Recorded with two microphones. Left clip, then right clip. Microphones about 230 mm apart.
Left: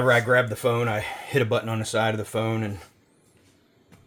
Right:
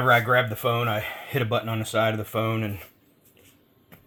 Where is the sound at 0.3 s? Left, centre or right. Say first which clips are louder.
Left 1 dB; centre.